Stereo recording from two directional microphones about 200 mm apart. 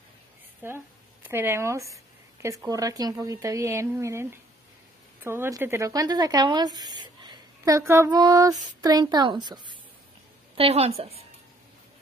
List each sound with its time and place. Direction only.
0.6 s a woman's voice: 10° right (ahead or behind); by 11.1 s 30° right (ahead or behind)